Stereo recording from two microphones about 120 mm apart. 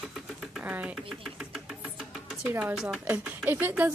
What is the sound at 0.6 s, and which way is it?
Speech, 15° right (ahead or behind).